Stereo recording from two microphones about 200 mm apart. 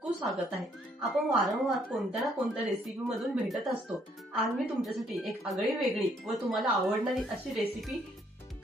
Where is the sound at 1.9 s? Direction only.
Centre (ahead or behind).